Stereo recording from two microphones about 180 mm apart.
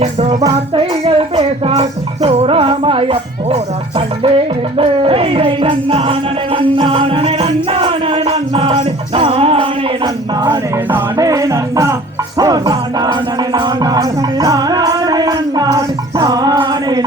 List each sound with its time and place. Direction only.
0.0 s music: 40° right (ahead or behind)
0.8 s speech: 35° right (ahead or behind)
4.8 s music: 30° right (ahead or behind)
10.9 s music: 20° right (ahead or behind)